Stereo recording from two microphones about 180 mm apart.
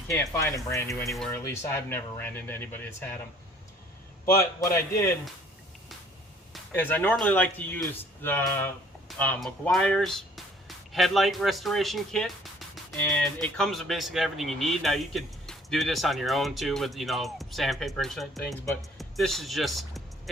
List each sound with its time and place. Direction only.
0.1 s speech: 15° left (ahead or behind)
4.4 s speech: 15° left (ahead or behind)
6.7 s speech: 10° left (ahead or behind)